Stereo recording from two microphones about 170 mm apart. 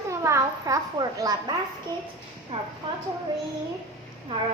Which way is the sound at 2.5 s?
35° right (ahead or behind).